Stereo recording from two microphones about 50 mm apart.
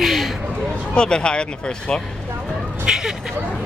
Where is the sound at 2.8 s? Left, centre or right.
Centre.